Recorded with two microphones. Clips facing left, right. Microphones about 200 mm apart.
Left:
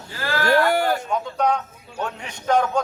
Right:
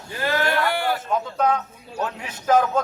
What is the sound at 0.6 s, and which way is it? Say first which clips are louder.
Speech: left 4 dB; 40° left (ahead or behind).